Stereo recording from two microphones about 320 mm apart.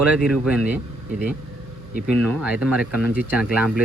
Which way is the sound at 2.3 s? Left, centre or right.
Centre.